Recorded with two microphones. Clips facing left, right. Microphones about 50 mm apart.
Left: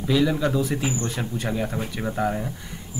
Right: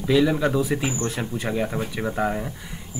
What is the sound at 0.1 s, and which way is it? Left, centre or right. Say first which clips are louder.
Speech: right 2 dB; centre.